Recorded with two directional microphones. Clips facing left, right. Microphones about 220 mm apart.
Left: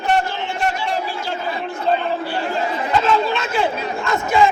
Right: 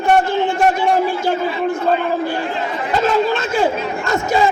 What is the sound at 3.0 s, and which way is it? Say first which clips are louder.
Speech: right 6 dB; 45° right (ahead or behind).